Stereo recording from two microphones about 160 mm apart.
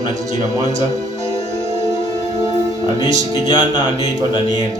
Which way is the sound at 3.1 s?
45° right (ahead or behind).